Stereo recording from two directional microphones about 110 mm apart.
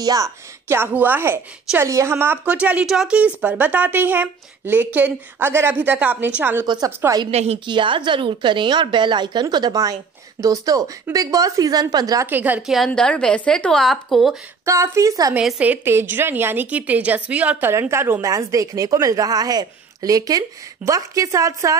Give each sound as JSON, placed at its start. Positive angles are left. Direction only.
{"t": 0.0, "sound": "a woman's voice", "side_deg": -30}
{"t": 7.2, "sound": "a woman's voice", "side_deg": -70}
{"t": 7.6, "sound": "a woman's voice", "side_deg": -45}
{"t": 12.3, "sound": "a woman's voice", "side_deg": -15}
{"t": 12.6, "sound": "a woman's voice", "side_deg": 0}
{"t": 14.6, "sound": "a woman's voice", "side_deg": -25}
{"t": 15.3, "sound": "a woman's voice", "side_deg": -10}